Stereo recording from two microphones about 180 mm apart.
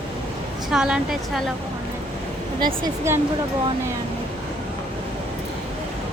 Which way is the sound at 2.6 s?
20° right (ahead or behind).